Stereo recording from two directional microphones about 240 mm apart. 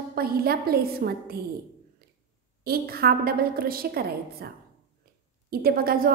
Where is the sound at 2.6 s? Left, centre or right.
Right.